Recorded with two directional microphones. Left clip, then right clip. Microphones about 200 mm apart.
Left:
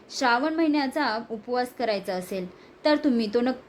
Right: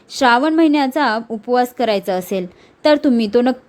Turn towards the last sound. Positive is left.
turn(degrees=-30)  # may be behind; listen again after turning